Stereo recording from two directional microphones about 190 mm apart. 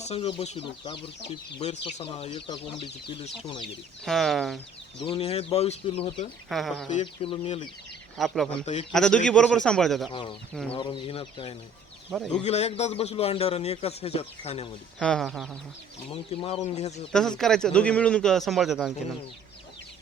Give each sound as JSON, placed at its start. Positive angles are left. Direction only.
{"t": 0.0, "sound": "speech", "side_deg": 30}
{"t": 4.0, "sound": "a man's voice", "side_deg": 0}
{"t": 5.0, "sound": "speech", "side_deg": 30}
{"t": 6.5, "sound": "a man's voice", "side_deg": 0}
{"t": 7.0, "sound": "speech", "side_deg": 25}
{"t": 8.2, "sound": "a man's voice", "side_deg": 0}
{"t": 8.6, "sound": "speech", "side_deg": 35}
{"t": 8.9, "sound": "a man's voice", "side_deg": 5}
{"t": 10.1, "sound": "speech", "side_deg": 25}
{"t": 14.9, "sound": "a man's voice", "side_deg": 0}
{"t": 16.3, "sound": "speech", "side_deg": 30}
{"t": 17.1, "sound": "a man's voice", "side_deg": 5}